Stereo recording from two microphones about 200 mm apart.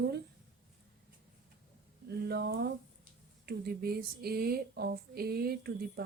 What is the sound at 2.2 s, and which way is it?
Speech, 50° right (ahead or behind).